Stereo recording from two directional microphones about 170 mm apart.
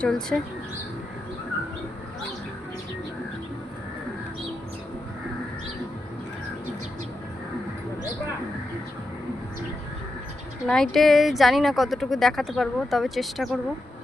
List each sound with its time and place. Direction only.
0.0 s speech: 5° left (ahead or behind)
10.7 s speech: 5° left (ahead or behind)